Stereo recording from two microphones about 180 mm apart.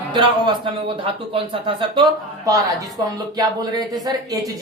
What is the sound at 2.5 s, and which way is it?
A woman's voice, 20° right (ahead or behind).